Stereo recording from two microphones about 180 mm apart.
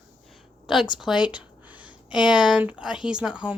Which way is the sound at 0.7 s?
Centre (ahead or behind).